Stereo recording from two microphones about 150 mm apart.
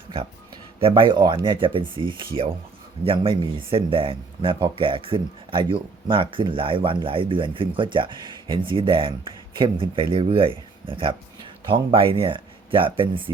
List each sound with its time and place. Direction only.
0.8 s speech: 35° right (ahead or behind)